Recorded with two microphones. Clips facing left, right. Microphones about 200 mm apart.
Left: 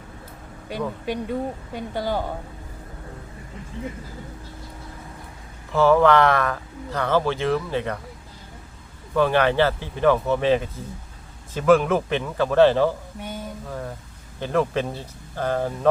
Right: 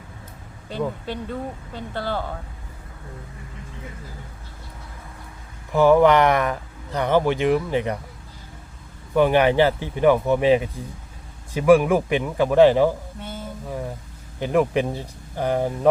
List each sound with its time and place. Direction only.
0.7 s speech: 15° left (ahead or behind)
5.7 s speech: 15° right (ahead or behind)
9.1 s speech: 15° right (ahead or behind)
13.1 s sizzle: 15° left (ahead or behind)
13.7 s speech: 15° right (ahead or behind)